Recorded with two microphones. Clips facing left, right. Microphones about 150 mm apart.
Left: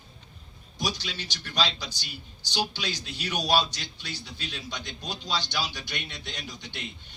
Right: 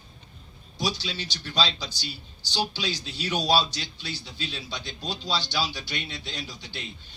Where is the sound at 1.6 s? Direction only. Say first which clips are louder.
Right 1 dB; 10° left (ahead or behind).